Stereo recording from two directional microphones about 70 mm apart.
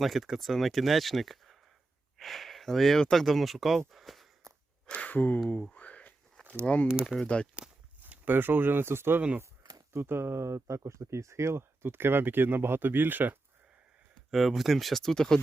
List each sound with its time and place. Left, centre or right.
0.0 s speech: centre
3.9 s a sound: centre
4.9 s speech: left
5.7 s a sound: centre
6.4 s walk: right
7.2 s speech: centre
8.0 s speech: right
14.3 s speech: centre